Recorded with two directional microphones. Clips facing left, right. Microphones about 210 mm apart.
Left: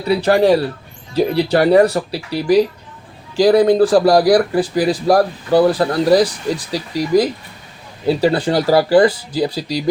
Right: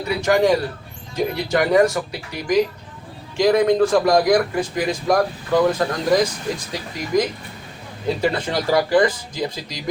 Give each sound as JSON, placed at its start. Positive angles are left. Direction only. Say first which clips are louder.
{"t": 0.2, "sound": "a man's voice", "louder": "left 2 dB", "side_deg": 35}